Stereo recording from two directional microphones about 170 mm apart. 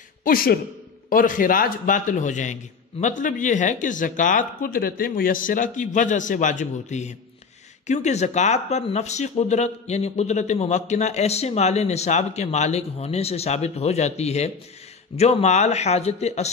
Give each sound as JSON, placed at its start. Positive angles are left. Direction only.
{"t": 0.2, "sound": "a man's voice", "side_deg": 55}